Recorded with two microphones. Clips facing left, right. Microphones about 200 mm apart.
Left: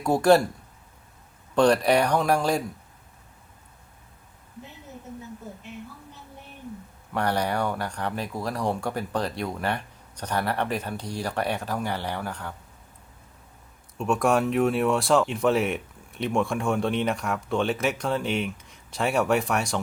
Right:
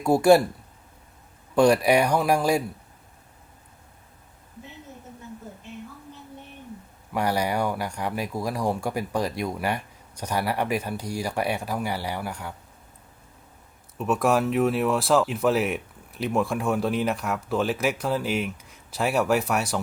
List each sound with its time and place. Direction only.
0.0 s speech: 10° right (ahead or behind)
1.5 s speech: 10° right (ahead or behind)
7.1 s speech: 10° right (ahead or behind)
14.0 s speech: centre (ahead or behind)